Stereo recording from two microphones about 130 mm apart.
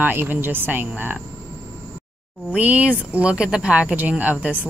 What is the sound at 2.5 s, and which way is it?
Speech, 10° right (ahead or behind).